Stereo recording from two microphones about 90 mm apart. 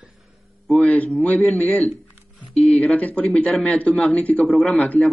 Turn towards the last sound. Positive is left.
turn(degrees=10)  # may be behind; listen again after turning